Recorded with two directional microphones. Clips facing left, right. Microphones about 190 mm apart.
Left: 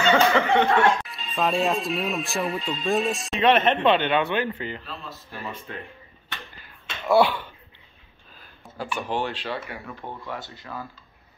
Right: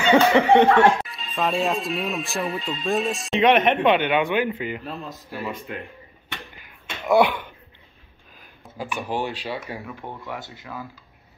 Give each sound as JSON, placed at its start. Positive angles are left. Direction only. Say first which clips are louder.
{"t": 0.0, "sound": "speech", "louder": "right 3 dB", "side_deg": -15}
{"t": 1.0, "sound": "speech", "louder": "even", "side_deg": 0}
{"t": 3.3, "sound": "speech", "louder": "right 2 dB", "side_deg": -15}
{"t": 6.3, "sound": "finger snapping", "louder": "right 2 dB", "side_deg": -15}
{"t": 8.4, "sound": "speech", "louder": "right 1 dB", "side_deg": -10}